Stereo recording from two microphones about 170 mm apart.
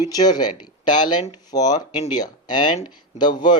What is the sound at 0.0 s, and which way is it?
Speech, 25° left (ahead or behind).